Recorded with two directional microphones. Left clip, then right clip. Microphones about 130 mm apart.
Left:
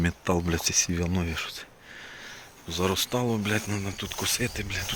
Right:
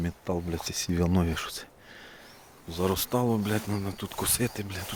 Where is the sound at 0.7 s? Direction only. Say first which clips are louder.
Left 7 dB; 25° right (ahead or behind).